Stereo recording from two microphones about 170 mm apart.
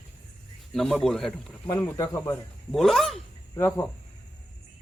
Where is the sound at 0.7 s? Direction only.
Centre (ahead or behind).